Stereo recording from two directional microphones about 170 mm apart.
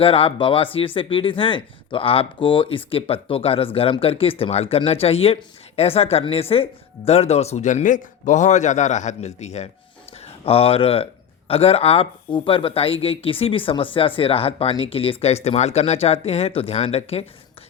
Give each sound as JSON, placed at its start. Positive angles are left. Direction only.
{"t": 0.0, "sound": "speech", "side_deg": 35}